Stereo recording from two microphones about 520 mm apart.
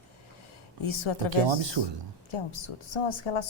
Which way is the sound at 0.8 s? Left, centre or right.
Left.